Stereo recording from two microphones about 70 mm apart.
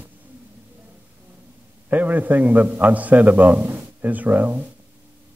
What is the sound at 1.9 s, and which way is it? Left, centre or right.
A man's voice, right.